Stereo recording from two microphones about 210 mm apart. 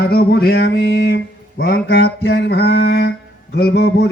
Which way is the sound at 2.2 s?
50° left (ahead or behind).